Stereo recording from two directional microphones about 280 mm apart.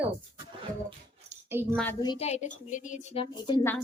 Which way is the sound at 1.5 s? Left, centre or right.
Centre.